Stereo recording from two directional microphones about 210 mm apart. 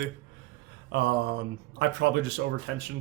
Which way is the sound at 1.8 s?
55° right (ahead or behind).